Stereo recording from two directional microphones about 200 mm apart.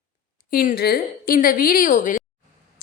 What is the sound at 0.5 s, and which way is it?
A woman's voice, 45° left (ahead or behind).